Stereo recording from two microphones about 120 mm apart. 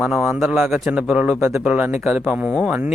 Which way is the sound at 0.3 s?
15° right (ahead or behind).